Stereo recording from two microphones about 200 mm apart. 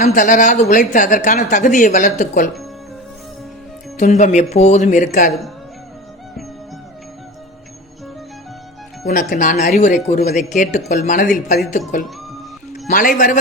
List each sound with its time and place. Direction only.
0.0 s speech: 40° left (ahead or behind)
3.9 s speech: 35° left (ahead or behind)
9.0 s a man's voice: 45° left (ahead or behind)